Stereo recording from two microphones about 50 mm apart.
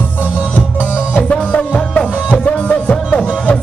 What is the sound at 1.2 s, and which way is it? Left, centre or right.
Music, left.